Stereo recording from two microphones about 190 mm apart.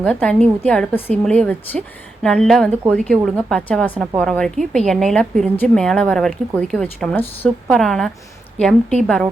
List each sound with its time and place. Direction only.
0.0 s a woman's voice: 5° left (ahead or behind)